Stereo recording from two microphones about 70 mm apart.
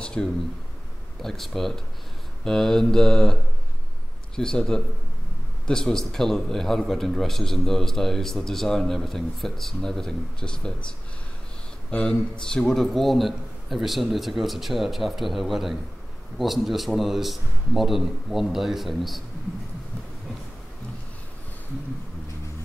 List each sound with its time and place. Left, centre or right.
0.0 s a sound: centre
1.2 s a man's voice: centre
2.4 s mantra: centre
4.4 s mantra: centre
5.7 s a man's voice: centre